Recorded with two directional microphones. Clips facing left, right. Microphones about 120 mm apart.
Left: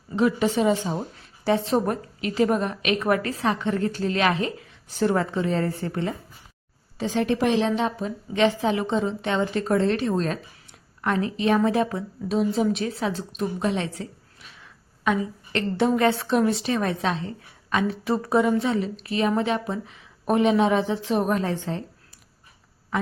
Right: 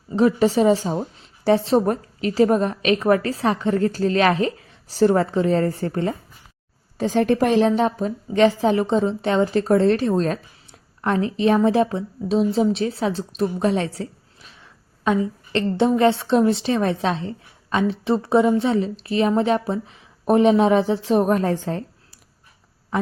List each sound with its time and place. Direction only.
0.2 s a woman's voice: 35° right (ahead or behind)